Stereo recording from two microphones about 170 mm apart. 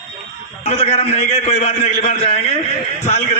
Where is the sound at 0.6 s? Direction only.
40° left (ahead or behind).